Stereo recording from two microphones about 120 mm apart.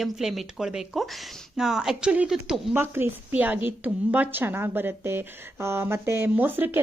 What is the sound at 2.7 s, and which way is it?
A woman's voice, 20° right (ahead or behind).